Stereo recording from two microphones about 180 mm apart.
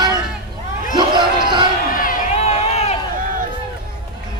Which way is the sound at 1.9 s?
50° left (ahead or behind).